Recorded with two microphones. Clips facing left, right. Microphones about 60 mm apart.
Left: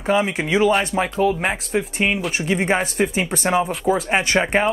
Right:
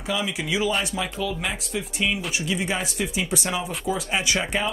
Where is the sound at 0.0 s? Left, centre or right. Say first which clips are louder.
Left 8 dB; left.